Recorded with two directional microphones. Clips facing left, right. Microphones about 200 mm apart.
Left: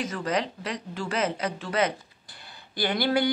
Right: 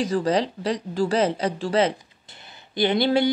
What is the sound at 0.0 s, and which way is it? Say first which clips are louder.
Speech: right 6 dB; 30° right (ahead or behind).